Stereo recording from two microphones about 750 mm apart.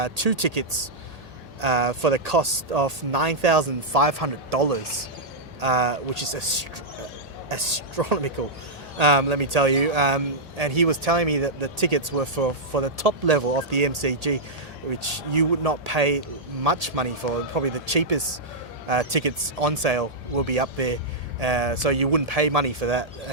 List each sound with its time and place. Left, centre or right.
0.0 s speech: right